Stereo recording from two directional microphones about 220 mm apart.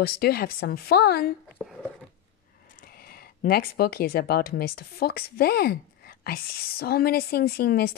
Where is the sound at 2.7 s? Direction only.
40° left (ahead or behind).